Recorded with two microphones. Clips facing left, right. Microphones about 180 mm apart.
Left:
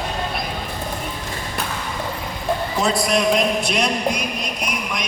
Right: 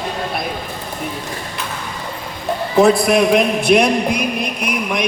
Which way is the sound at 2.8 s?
55° right (ahead or behind).